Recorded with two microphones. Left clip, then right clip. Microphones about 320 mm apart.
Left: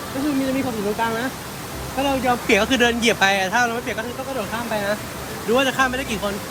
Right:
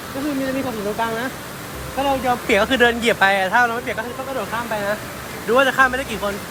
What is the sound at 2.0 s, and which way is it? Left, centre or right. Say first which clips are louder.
Speech: right 1 dB; centre.